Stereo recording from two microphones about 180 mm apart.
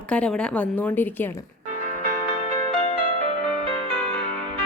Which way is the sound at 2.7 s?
40° left (ahead or behind).